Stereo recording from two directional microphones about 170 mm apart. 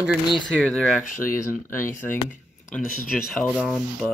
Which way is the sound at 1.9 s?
50° left (ahead or behind).